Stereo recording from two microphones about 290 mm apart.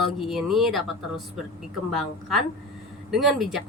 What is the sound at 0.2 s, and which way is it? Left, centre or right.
Speech, centre.